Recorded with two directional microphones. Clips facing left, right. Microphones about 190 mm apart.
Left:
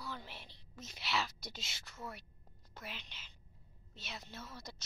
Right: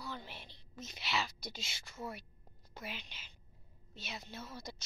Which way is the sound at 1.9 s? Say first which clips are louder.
Right 4 dB; 15° right (ahead or behind).